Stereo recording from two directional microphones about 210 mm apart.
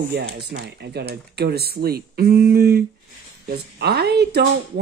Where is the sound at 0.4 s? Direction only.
50° right (ahead or behind).